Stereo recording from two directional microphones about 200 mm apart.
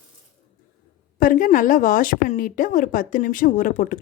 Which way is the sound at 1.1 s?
45° left (ahead or behind).